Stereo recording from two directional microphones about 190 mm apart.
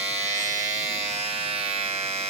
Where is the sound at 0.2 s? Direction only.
40° right (ahead or behind).